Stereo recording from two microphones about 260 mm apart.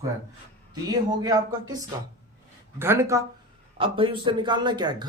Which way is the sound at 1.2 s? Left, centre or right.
Centre.